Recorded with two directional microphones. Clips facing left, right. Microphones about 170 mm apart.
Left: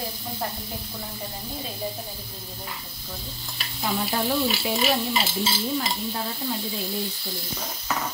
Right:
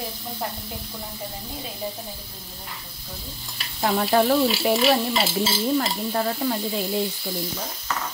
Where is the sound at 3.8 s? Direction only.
60° right (ahead or behind).